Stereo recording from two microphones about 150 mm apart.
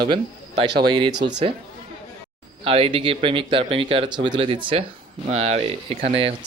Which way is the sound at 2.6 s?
40° right (ahead or behind).